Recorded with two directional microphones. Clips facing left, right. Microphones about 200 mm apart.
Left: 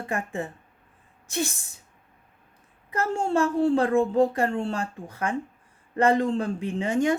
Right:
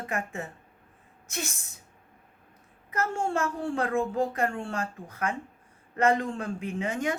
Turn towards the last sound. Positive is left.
turn(degrees=30)  # may be behind; listen again after turning